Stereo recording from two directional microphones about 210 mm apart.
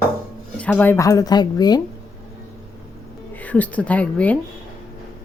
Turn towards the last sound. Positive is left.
turn(degrees=5)  # may be behind; listen again after turning